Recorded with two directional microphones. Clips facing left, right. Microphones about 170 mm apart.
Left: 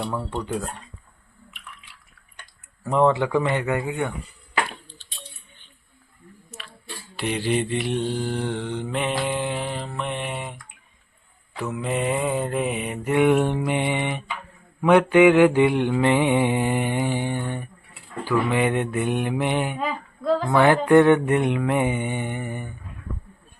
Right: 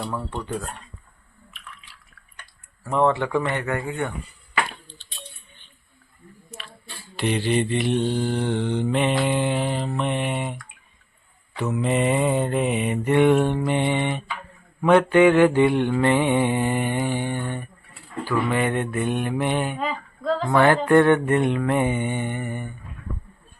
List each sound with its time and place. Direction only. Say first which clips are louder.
0.0 s mantra: left 1 dB; centre (ahead or behind)
0.3 s mantra: left 2 dB; 15° left (ahead or behind)
2.8 s mantra: left 1 dB; 15° left (ahead or behind)
7.2 s mantra: right 2 dB; 5° left (ahead or behind)
19.8 s mantra: even; 5° left (ahead or behind)